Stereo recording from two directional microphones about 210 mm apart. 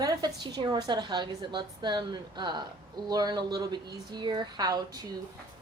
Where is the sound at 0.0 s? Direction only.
20° right (ahead or behind).